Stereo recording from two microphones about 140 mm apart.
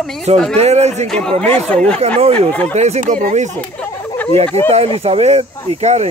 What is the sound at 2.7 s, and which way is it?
Speech, 55° right (ahead or behind).